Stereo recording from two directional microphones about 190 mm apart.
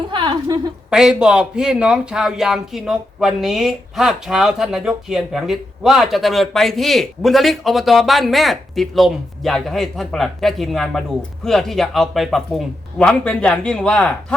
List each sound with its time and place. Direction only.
0.1 s a woman's voice: 25° right (ahead or behind)
0.9 s speech: 5° right (ahead or behind)